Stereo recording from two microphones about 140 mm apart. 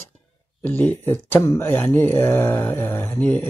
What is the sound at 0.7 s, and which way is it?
Speech, 10° left (ahead or behind).